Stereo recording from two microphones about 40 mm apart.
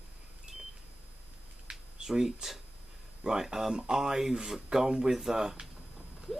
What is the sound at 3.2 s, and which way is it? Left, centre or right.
Speech, centre.